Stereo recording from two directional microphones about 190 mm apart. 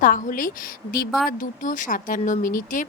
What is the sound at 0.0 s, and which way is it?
Speech, 45° left (ahead or behind).